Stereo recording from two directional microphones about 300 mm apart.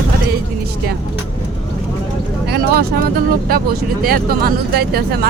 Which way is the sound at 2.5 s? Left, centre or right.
Right.